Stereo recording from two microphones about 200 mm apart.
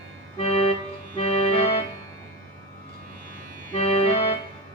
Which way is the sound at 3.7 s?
30° left (ahead or behind).